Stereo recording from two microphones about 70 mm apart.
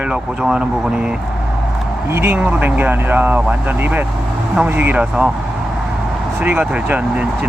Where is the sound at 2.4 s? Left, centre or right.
Right.